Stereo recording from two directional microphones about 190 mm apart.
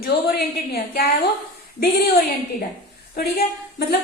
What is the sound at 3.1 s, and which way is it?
Speech, 55° left (ahead or behind).